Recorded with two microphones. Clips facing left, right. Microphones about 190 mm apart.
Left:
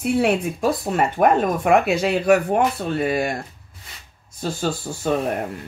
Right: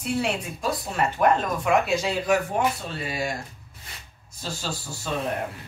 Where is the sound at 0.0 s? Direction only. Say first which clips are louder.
Left 7 dB; 60° left (ahead or behind).